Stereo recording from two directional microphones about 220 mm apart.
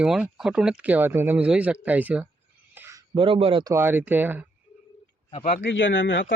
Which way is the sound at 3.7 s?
10° right (ahead or behind).